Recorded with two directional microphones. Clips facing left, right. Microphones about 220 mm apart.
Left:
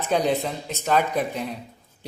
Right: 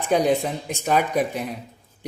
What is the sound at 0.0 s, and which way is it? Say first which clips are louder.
Speech: right 3 dB; 15° right (ahead or behind).